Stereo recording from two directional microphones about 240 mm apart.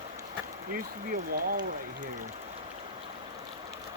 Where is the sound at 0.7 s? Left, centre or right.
Right.